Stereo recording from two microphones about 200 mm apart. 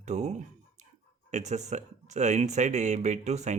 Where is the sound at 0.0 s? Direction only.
35° right (ahead or behind).